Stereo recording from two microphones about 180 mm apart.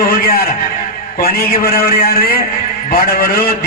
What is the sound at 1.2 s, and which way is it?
Mantra, 55° left (ahead or behind).